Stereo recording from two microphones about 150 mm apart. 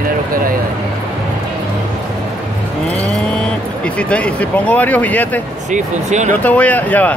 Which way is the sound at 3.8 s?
10° left (ahead or behind).